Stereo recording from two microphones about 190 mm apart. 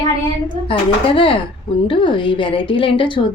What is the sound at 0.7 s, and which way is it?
Speech, 30° left (ahead or behind).